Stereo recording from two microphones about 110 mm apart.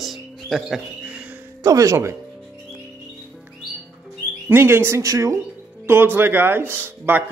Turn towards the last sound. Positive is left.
turn(degrees=-20)  # may be behind; listen again after turning